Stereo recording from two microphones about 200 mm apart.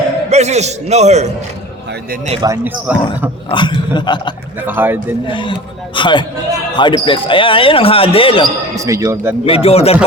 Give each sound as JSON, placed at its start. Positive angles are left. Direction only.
{"t": 0.3, "sound": "a man's voice", "side_deg": -35}
{"t": 2.4, "sound": "speech", "side_deg": -10}
{"t": 3.5, "sound": "speech", "side_deg": 25}
{"t": 4.6, "sound": "speech", "side_deg": -10}
{"t": 5.3, "sound": "speech", "side_deg": 25}
{"t": 8.7, "sound": "speech", "side_deg": -15}
{"t": 9.5, "sound": "speech", "side_deg": 30}